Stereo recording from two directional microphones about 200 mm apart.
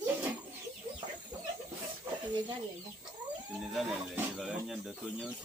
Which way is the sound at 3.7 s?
Centre (ahead or behind).